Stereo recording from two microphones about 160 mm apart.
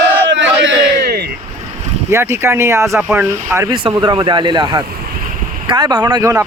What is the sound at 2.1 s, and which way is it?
Speech, 15° right (ahead or behind).